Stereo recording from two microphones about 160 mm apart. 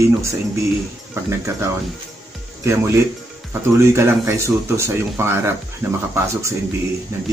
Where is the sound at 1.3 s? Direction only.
15° right (ahead or behind).